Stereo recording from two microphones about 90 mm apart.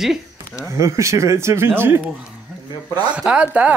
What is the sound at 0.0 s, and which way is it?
Speech, 5° right (ahead or behind).